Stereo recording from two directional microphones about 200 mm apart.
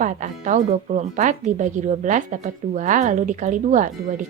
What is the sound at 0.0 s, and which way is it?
Speech, 40° right (ahead or behind).